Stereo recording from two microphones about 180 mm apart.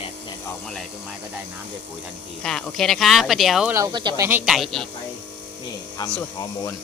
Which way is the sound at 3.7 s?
25° right (ahead or behind).